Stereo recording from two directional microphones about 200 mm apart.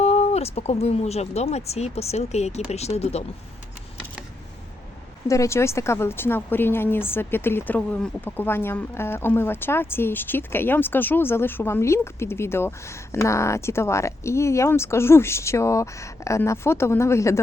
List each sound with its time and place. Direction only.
0.0 s speech: 30° left (ahead or behind)
5.3 s speech: 15° left (ahead or behind)